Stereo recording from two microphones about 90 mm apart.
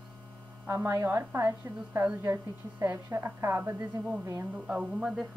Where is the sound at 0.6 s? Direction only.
25° right (ahead or behind).